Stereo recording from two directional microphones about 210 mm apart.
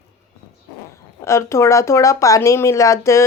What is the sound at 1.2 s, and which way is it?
Speech, 15° left (ahead or behind).